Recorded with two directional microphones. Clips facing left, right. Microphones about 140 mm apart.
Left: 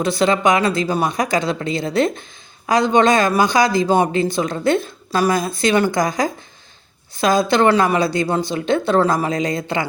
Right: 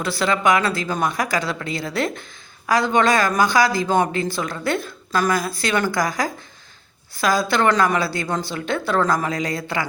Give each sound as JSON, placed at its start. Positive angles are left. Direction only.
{"t": 0.0, "sound": "a man's voice", "side_deg": 20}